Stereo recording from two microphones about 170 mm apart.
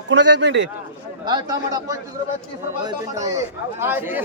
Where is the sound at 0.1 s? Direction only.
90° right.